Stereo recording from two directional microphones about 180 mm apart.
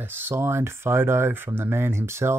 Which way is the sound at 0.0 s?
10° right (ahead or behind).